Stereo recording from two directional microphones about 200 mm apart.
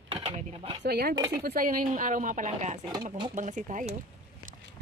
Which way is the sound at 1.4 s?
45° right (ahead or behind).